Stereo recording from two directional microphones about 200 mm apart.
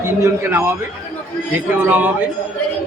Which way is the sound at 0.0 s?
10° right (ahead or behind).